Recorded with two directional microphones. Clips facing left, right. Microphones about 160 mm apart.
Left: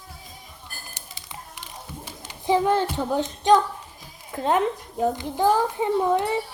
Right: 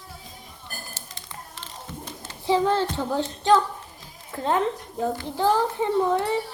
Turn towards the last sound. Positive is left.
turn(degrees=15)  # may be behind; listen again after turning